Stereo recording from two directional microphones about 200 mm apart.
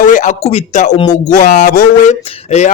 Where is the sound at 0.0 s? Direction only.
40° left (ahead or behind).